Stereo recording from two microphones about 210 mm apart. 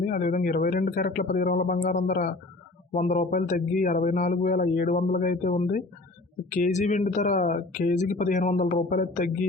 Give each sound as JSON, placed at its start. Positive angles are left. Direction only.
{"t": 0.0, "sound": "speech", "side_deg": 40}